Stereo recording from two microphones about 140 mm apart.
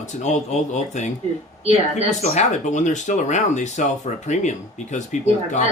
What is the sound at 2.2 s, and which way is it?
Speech, 55° left (ahead or behind).